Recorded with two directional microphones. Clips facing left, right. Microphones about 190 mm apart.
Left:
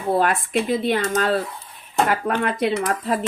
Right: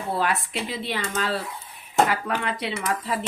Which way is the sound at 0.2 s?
50° left (ahead or behind).